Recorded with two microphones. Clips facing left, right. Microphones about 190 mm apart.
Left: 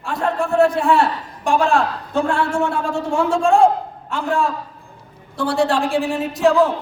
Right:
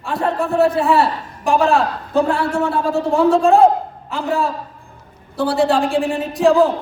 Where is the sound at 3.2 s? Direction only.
35° right (ahead or behind).